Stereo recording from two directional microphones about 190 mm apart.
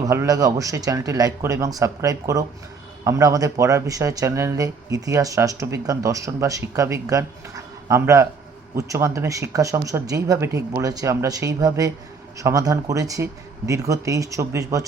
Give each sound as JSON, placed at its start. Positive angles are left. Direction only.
{"t": 0.0, "sound": "speech", "side_deg": -15}